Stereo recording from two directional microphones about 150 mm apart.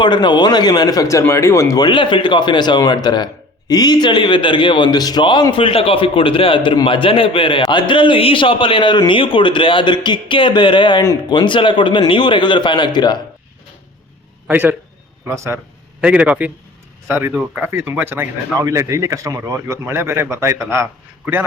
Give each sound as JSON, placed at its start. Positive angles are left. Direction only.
{"t": 0.0, "sound": "a man's voice", "side_deg": 30}
{"t": 14.4, "sound": "a man's voice", "side_deg": -10}
{"t": 16.0, "sound": "speech", "side_deg": -10}